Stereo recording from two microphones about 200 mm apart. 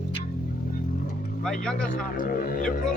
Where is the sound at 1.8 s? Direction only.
45° left (ahead or behind).